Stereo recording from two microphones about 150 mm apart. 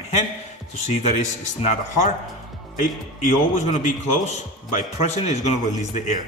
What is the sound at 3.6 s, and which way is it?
A man's voice, 50° left (ahead or behind).